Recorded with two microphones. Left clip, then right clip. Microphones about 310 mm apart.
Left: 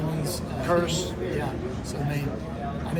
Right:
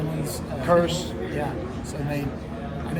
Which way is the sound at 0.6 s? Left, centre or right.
Right.